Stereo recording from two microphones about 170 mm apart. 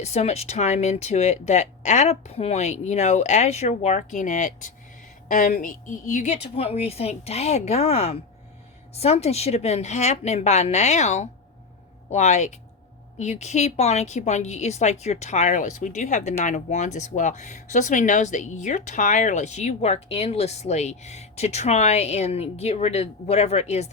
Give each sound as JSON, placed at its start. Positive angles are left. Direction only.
{"t": 0.0, "sound": "a woman's voice", "side_deg": 40}